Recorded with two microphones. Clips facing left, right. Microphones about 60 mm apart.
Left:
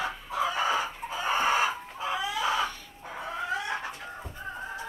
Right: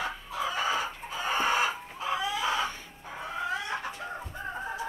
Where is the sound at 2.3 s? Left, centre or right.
Centre.